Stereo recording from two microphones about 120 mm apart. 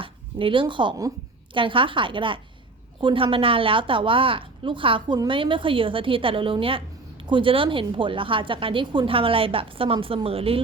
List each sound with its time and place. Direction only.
0.0 s a woman's voice: 45° right (ahead or behind)